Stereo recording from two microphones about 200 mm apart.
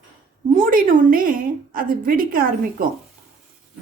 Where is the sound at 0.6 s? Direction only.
45° right (ahead or behind).